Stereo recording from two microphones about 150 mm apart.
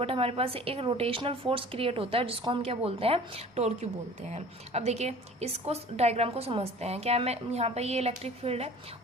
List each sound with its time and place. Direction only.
0.0 s a woman's voice: 40° right (ahead or behind)